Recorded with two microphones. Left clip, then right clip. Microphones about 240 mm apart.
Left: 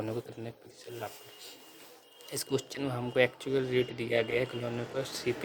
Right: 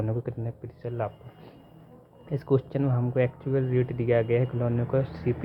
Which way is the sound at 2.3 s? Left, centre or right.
Left.